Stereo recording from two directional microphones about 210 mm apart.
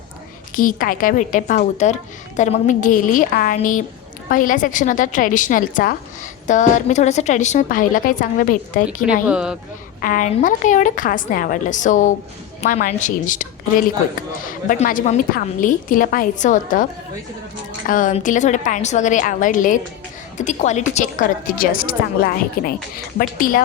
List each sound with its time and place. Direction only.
0.5 s a woman's voice: 40° left (ahead or behind)
9.2 s speech: 5° right (ahead or behind)
10.0 s a woman's voice: 40° left (ahead or behind)
17.8 s a woman's voice: 40° left (ahead or behind)